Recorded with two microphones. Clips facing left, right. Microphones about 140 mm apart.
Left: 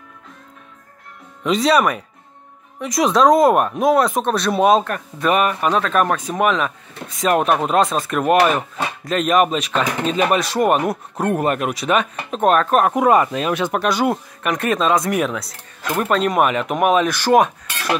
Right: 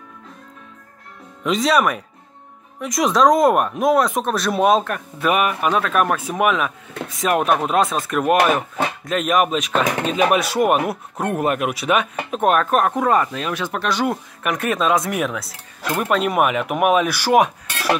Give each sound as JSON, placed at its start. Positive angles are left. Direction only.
{"t": 1.4, "sound": "speech", "side_deg": 0}
{"t": 12.9, "sound": "speech", "side_deg": 15}
{"t": 13.8, "sound": "speech", "side_deg": 10}
{"t": 14.4, "sound": "speech", "side_deg": -5}